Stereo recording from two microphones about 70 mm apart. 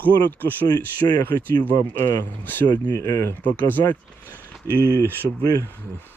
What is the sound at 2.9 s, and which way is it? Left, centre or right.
Speech, left.